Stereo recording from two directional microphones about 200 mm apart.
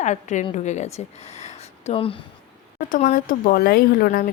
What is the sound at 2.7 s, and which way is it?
Speech, 40° left (ahead or behind).